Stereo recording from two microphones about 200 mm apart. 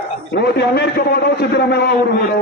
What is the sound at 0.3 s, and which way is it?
A man's voice, 55° left (ahead or behind).